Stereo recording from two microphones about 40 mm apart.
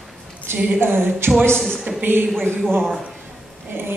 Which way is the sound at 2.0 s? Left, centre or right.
Right.